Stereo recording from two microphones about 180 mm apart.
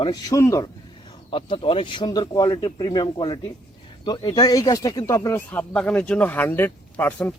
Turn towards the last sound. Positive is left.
turn(degrees=10)  # may be behind; listen again after turning